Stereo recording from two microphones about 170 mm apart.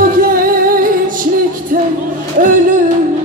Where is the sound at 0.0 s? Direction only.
55° right (ahead or behind).